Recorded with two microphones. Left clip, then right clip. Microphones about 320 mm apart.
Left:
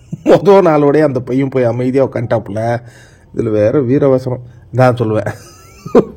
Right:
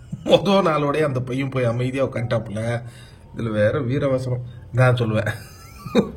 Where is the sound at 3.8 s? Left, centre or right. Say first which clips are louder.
Left 11 dB; centre.